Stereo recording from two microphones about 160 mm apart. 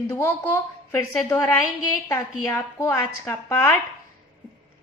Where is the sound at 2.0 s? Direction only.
15° left (ahead or behind).